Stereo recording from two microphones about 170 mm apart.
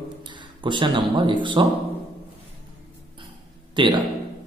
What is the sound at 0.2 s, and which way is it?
Speech, 25° right (ahead or behind).